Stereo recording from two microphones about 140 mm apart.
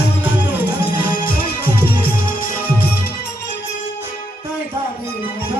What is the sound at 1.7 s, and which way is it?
Music, 15° right (ahead or behind).